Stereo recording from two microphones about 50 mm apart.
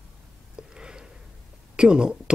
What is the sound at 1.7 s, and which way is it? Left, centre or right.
Speech, centre.